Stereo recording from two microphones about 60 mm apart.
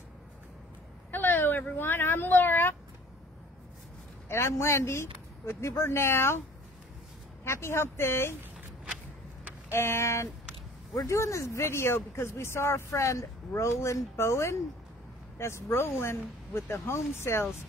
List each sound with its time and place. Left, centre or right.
1.1 s a sound: left
4.3 s speech: left
7.4 s speech: left
9.7 s speech: left
13.0 s speech: left